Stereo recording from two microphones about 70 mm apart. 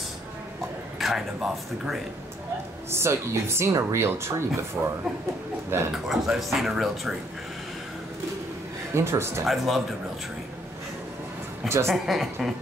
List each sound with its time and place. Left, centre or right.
0.9 s speech: centre
2.9 s speech: right
4.8 s speech: centre
5.7 s speech: right
6.0 s speech: centre
8.9 s speech: right
9.5 s speech: centre
11.9 s speech: centre